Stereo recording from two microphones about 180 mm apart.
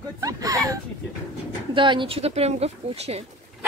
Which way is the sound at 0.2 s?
20° right (ahead or behind).